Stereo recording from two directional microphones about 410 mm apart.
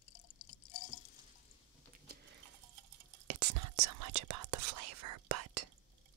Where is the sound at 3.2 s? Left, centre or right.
Right.